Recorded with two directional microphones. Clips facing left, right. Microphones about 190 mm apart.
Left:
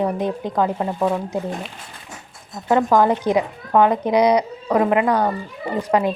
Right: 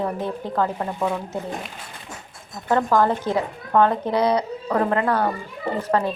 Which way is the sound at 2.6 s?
15° left (ahead or behind).